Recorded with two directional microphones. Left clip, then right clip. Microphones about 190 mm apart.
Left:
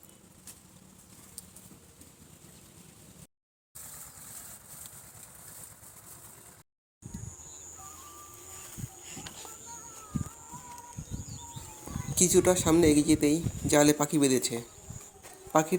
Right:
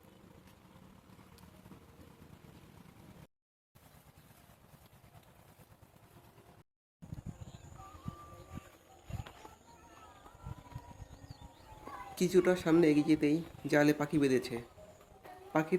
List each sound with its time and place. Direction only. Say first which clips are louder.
12.1 s speech: left 5 dB; 20° left (ahead or behind)